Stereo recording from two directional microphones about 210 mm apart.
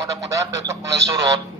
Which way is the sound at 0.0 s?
15° right (ahead or behind).